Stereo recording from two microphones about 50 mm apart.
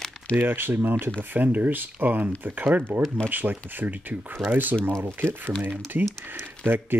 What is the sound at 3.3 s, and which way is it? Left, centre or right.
Speech, right.